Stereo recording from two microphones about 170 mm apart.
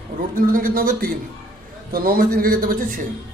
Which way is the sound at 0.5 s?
55° right (ahead or behind).